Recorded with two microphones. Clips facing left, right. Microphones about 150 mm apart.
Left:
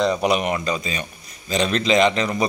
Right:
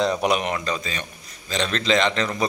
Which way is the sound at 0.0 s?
Centre (ahead or behind).